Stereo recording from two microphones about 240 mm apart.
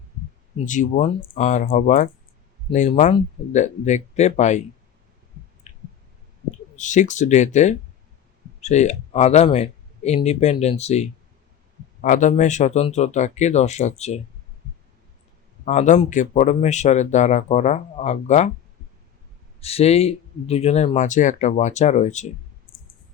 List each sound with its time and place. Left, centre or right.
0.5 s speech: left
5.7 s clicking: left
6.7 s speech: left
15.6 s speech: left
19.6 s speech: left